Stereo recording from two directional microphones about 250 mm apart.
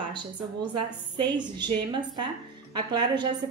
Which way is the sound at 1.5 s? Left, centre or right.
Centre.